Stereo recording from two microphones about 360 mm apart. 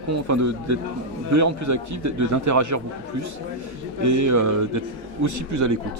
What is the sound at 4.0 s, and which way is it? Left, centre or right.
A man's voice, right.